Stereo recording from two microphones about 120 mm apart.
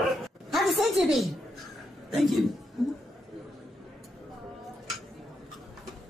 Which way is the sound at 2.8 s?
Centre (ahead or behind).